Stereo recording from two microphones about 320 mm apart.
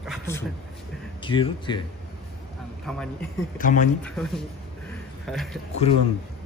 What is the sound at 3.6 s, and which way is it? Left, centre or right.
Speech, left.